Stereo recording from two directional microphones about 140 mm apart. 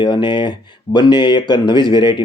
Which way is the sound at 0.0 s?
35° left (ahead or behind).